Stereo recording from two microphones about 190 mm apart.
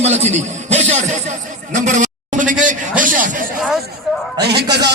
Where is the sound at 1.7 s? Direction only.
40° right (ahead or behind).